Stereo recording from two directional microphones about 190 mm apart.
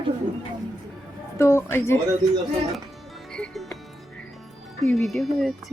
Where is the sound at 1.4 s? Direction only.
15° left (ahead or behind).